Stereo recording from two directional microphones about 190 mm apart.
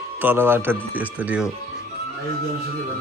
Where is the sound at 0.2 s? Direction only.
10° right (ahead or behind).